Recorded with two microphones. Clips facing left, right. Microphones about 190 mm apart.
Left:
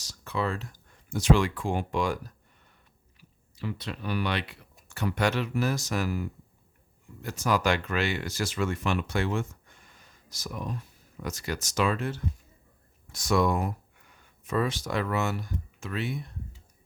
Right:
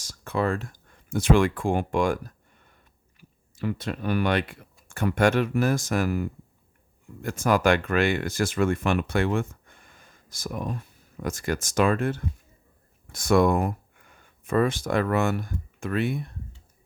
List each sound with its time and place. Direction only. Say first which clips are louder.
0.0 s speech: right 4 dB; 50° right (ahead or behind)